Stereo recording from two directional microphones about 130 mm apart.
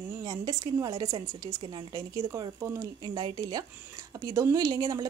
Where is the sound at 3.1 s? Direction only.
35° right (ahead or behind).